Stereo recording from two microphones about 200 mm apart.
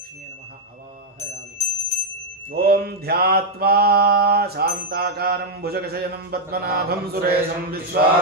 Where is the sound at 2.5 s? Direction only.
50° right (ahead or behind).